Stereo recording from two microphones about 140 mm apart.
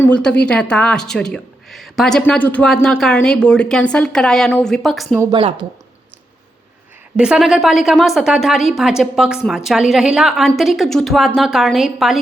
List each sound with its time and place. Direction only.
0.1 s speech: 5° left (ahead or behind)
5.3 s a woman's voice: 40° right (ahead or behind)
7.2 s speech: 5° right (ahead or behind)